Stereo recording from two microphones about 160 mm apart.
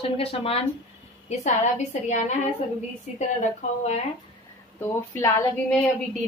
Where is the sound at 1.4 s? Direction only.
50° left (ahead or behind).